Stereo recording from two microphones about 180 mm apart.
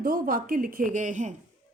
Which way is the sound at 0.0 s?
50° right (ahead or behind).